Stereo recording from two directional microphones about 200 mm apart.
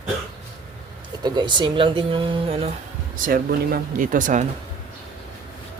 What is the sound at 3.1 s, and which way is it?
Speech, 45° right (ahead or behind).